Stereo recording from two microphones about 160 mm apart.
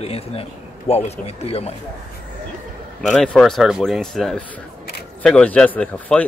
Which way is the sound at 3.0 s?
5° left (ahead or behind).